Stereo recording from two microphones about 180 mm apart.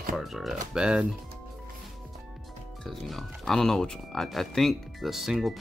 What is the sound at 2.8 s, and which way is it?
Speech, centre (ahead or behind).